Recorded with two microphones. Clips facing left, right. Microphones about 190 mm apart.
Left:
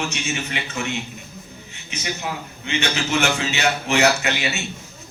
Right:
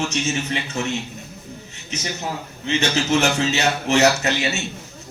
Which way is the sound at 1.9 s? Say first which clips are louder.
Right 1 dB; 40° right (ahead or behind).